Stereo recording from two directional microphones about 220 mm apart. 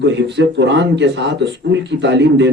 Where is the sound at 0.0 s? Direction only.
50° right (ahead or behind).